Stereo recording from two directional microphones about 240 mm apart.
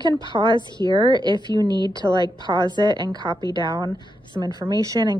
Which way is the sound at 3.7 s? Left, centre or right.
Centre.